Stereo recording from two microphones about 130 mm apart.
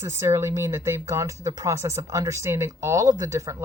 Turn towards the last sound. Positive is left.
turn(degrees=-25)  # may be behind; listen again after turning